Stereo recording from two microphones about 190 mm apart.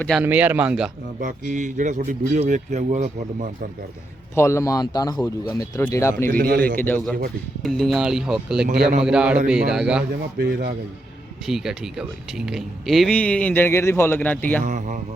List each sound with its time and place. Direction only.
0.2 s speech: 10° right (ahead or behind)
1.2 s speech: 40° right (ahead or behind)
4.4 s speech: 15° left (ahead or behind)
6.3 s a man's voice: 50° right (ahead or behind)
6.7 s speech: 10° left (ahead or behind)
10.3 s speech: 60° right (ahead or behind)
11.4 s speech: centre (ahead or behind)
14.6 s speech: 45° right (ahead or behind)